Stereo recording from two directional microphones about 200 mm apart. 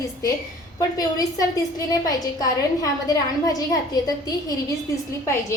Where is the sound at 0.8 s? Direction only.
20° left (ahead or behind).